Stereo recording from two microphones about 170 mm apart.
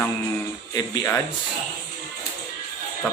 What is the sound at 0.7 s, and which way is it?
Speech, 20° left (ahead or behind).